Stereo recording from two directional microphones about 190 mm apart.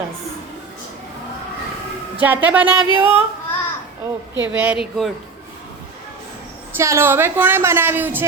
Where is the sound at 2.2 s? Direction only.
10° right (ahead or behind).